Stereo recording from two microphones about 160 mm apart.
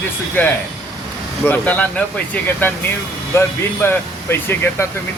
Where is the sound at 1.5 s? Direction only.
10° left (ahead or behind).